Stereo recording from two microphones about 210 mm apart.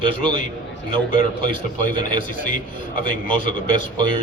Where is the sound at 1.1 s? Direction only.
40° left (ahead or behind).